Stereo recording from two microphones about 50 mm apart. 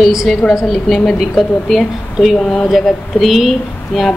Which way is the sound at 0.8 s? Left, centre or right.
Centre.